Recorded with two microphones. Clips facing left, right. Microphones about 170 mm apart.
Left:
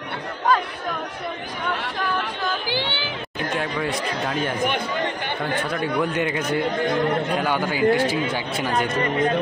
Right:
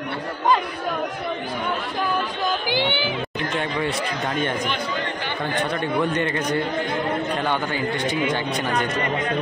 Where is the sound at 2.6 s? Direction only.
15° right (ahead or behind).